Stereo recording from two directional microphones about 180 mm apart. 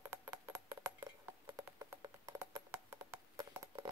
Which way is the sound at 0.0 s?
15° right (ahead or behind).